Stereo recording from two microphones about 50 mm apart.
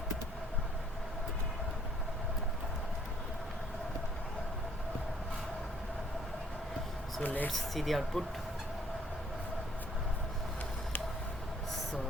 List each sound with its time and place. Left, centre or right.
7.2 s speech: left
7.5 s speech: centre